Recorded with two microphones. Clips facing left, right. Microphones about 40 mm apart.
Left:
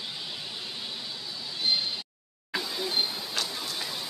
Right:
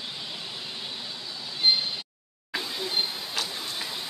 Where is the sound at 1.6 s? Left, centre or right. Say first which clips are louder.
Right 5 dB; right.